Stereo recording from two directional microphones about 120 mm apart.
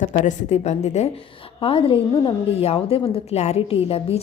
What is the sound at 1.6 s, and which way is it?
A woman's voice, 50° left (ahead or behind).